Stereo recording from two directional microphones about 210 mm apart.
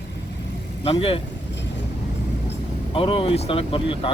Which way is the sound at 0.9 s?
25° left (ahead or behind).